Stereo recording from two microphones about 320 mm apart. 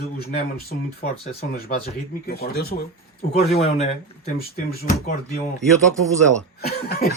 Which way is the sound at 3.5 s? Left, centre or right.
Centre.